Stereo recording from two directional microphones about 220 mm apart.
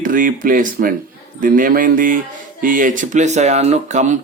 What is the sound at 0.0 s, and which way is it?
Speech, 40° right (ahead or behind).